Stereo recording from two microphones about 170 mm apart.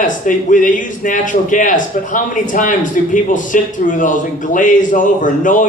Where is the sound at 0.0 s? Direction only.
50° left (ahead or behind).